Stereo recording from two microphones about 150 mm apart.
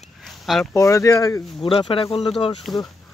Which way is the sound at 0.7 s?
20° left (ahead or behind).